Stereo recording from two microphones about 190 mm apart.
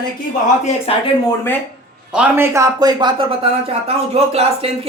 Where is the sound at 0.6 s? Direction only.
30° left (ahead or behind).